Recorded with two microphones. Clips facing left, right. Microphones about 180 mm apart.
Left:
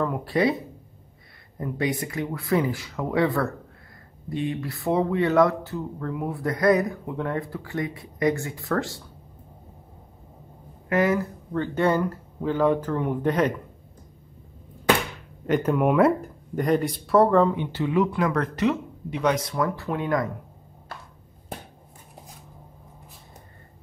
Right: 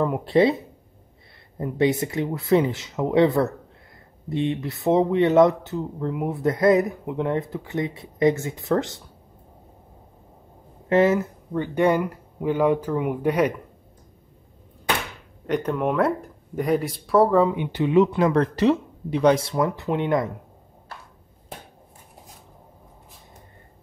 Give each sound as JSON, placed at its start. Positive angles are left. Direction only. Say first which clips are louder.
{"t": 0.0, "sound": "speech", "louder": "right 4 dB", "side_deg": -20}
{"t": 1.6, "sound": "speech", "louder": "right 5 dB", "side_deg": -25}
{"t": 10.9, "sound": "speech", "louder": "right 4 dB", "side_deg": -25}
{"t": 11.5, "sound": "speech", "louder": "right 2 dB", "side_deg": -15}
{"t": 15.4, "sound": "speech", "louder": "left 2 dB", "side_deg": 5}